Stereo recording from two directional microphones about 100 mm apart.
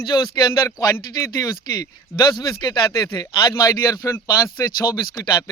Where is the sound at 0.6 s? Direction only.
35° left (ahead or behind).